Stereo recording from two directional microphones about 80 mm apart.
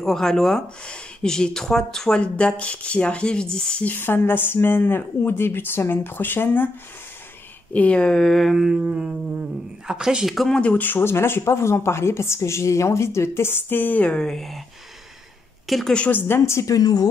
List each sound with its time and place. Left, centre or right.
0.0 s speech: centre; by 6.7 s left
7.7 s speech: centre
10.6 s speech: left
14.1 s speech: centre
15.6 s a sound: centre
16.1 s speech: left
16.7 s speech: left